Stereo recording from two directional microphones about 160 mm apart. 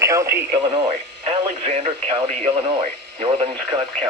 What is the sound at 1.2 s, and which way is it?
Speech, 40° right (ahead or behind).